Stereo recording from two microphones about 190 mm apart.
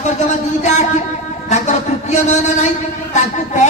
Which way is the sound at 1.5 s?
40° left (ahead or behind).